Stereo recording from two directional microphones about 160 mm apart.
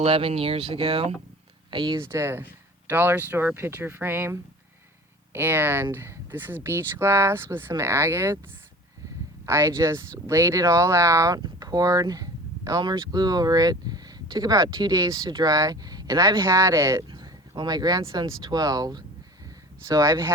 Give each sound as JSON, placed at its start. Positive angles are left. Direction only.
{"t": 0.0, "sound": "speech", "side_deg": -35}
{"t": 9.5, "sound": "speech", "side_deg": -20}